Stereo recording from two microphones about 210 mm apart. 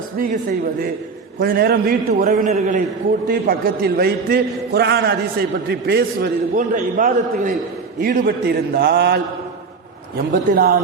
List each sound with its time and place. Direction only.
0.2 s a man's voice: 40° right (ahead or behind)
1.4 s a man's voice: 45° right (ahead or behind)